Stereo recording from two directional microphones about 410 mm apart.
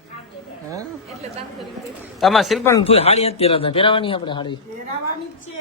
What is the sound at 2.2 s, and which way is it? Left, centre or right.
Speech, centre.